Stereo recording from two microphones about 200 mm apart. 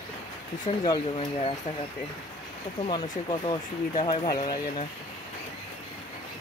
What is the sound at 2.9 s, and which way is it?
Speech, 25° left (ahead or behind).